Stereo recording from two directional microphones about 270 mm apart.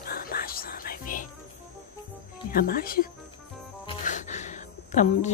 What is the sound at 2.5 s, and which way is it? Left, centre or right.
Speech, left.